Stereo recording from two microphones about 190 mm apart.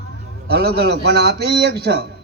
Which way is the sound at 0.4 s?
55° right (ahead or behind).